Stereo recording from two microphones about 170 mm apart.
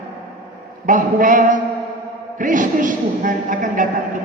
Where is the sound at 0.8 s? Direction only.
50° right (ahead or behind).